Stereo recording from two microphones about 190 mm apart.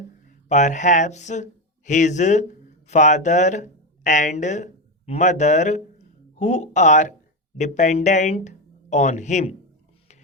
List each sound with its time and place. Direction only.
0.4 s speech: 40° left (ahead or behind)